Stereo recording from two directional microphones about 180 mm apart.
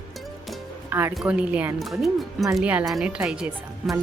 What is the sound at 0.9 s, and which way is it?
A woman's voice, 10° right (ahead or behind).